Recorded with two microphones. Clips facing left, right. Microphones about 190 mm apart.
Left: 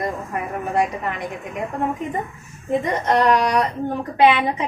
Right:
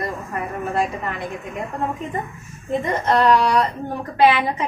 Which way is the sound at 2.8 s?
15° left (ahead or behind).